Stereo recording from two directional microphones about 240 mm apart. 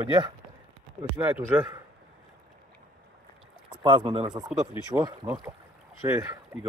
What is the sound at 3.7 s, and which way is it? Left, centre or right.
Speech, centre.